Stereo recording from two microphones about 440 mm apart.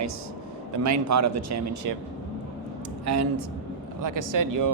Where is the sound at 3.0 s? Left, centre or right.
Right.